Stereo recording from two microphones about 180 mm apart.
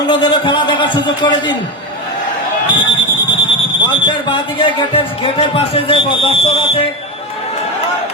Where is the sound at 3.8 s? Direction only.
25° left (ahead or behind).